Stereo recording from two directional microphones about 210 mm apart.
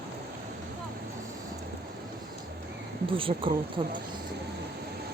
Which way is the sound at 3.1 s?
25° right (ahead or behind).